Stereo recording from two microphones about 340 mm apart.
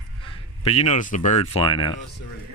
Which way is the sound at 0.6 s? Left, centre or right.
Centre.